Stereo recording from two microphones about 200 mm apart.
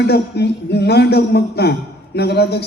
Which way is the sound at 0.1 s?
55° left (ahead or behind).